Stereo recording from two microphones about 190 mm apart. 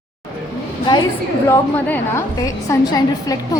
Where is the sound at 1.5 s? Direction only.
10° left (ahead or behind).